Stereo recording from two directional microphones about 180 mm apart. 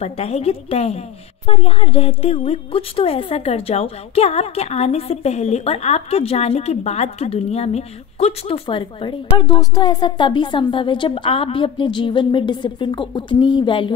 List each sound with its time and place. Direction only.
0.0 s a woman's voice: 35° left (ahead or behind)